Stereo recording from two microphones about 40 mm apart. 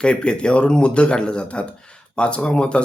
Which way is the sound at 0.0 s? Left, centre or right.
Left.